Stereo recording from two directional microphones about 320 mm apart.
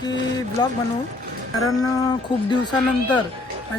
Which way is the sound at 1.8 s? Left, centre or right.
Centre.